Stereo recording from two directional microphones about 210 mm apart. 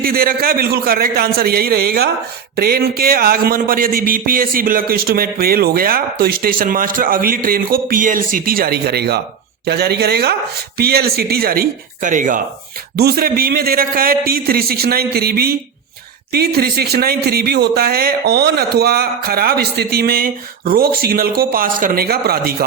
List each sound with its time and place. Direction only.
0.0 s a man's voice: 45° right (ahead or behind)